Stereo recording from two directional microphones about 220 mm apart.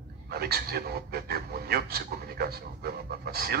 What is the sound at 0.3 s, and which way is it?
Speech, 45° right (ahead or behind).